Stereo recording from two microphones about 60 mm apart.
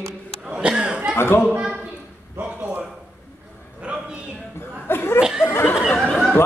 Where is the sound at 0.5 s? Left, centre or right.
Centre.